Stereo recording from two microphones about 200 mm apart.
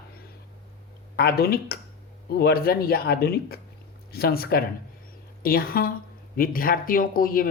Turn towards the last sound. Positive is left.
turn(degrees=45)  # may be behind; listen again after turning